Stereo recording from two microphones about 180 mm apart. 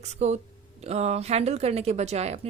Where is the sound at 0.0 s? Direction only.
40° right (ahead or behind).